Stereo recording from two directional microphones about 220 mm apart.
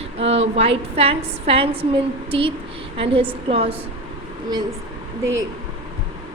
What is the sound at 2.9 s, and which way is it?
Speech, 25° right (ahead or behind).